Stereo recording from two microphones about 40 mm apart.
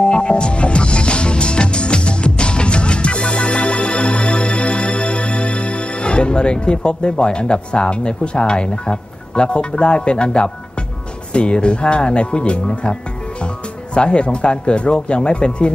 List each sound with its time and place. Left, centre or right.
0.0 s music: left
11.3 s speech: left
13.9 s speech: left